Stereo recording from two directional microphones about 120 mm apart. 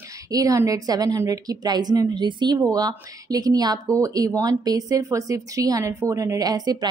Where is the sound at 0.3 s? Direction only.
30° right (ahead or behind).